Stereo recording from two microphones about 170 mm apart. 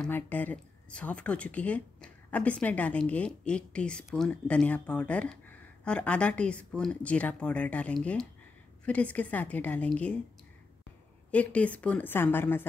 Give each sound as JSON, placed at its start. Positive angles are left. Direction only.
{"t": 0.0, "sound": "speech", "side_deg": 10}
{"t": 11.3, "sound": "speech", "side_deg": 10}